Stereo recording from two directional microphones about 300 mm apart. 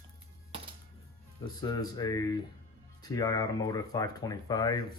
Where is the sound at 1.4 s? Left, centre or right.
Centre.